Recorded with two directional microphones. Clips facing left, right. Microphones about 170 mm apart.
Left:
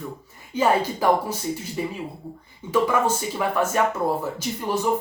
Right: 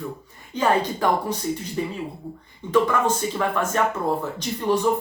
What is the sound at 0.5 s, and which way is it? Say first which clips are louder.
Speech: even; 10° left (ahead or behind).